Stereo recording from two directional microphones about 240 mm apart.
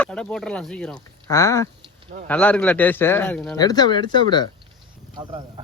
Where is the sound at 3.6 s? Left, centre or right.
Centre.